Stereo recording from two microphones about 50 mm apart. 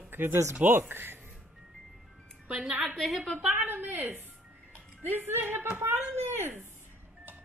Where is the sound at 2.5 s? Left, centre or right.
Right.